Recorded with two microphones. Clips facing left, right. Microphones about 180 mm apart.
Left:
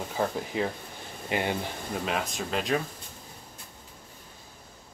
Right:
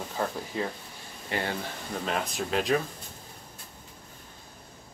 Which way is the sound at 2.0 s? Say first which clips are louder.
Right 2 dB; centre (ahead or behind).